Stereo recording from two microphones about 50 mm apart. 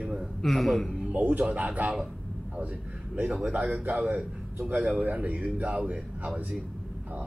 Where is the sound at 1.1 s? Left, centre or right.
Right.